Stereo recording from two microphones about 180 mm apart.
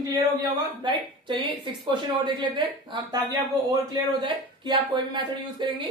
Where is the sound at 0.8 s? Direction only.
25° right (ahead or behind).